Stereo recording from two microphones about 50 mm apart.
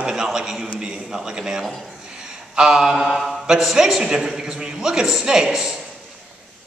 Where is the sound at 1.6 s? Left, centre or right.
Centre.